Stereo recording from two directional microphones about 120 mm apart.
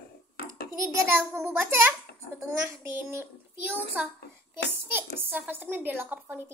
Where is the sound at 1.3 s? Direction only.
20° right (ahead or behind).